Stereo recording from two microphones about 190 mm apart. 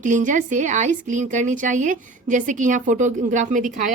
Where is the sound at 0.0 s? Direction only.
40° right (ahead or behind).